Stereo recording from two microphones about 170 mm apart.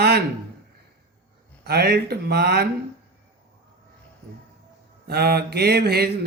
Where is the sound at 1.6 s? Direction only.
70° right (ahead or behind).